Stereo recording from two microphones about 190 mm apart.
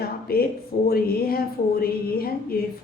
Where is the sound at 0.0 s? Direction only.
55° left (ahead or behind).